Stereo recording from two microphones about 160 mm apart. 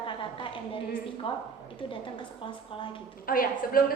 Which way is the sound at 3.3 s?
65° left (ahead or behind).